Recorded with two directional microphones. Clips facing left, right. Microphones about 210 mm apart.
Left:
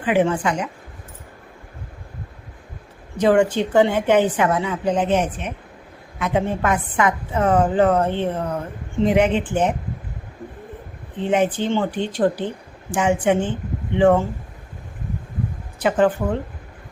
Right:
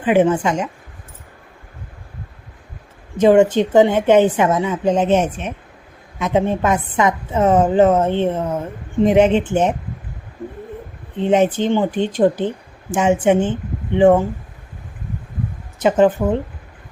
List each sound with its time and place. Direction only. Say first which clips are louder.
0.0 s a woman's voice: right 4 dB; 20° right (ahead or behind)
3.2 s a woman's voice: right 5 dB; 20° right (ahead or behind)
11.2 s a woman's voice: right 4 dB; 25° right (ahead or behind)
15.8 s a woman's voice: right 4 dB; 25° right (ahead or behind)